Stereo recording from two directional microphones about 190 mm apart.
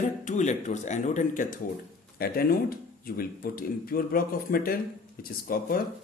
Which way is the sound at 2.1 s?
50° left (ahead or behind).